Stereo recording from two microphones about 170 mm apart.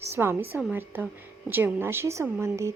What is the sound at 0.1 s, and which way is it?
A woman's voice, 15° right (ahead or behind).